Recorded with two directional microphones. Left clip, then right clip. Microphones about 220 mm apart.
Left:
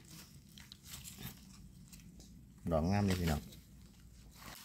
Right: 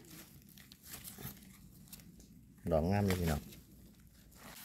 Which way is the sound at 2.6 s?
20° right (ahead or behind).